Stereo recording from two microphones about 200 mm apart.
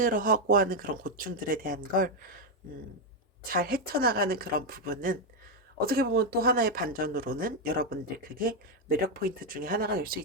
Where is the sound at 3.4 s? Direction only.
45° right (ahead or behind).